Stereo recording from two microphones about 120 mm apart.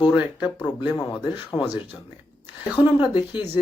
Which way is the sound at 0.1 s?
10° right (ahead or behind).